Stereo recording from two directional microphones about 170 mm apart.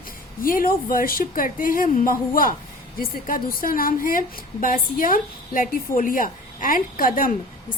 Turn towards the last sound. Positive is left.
turn(degrees=55)  # may be behind; listen again after turning